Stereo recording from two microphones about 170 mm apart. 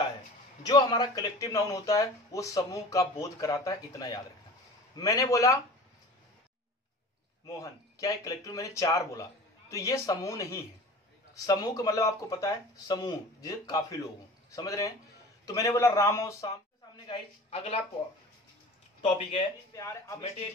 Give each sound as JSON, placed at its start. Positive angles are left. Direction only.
{"t": 0.7, "sound": "speech", "side_deg": 25}
{"t": 7.4, "sound": "a man's voice", "side_deg": 20}
{"t": 18.9, "sound": "speech", "side_deg": 35}
{"t": 19.7, "sound": "speech", "side_deg": 20}